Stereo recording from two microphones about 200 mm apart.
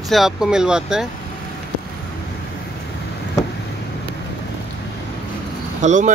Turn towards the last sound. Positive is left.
turn(degrees=-35)  # may be behind; listen again after turning